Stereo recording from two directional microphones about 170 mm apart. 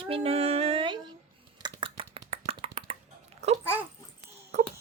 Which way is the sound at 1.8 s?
30° right (ahead or behind).